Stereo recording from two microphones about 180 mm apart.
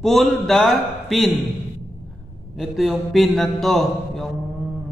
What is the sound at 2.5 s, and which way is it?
Speech, centre (ahead or behind).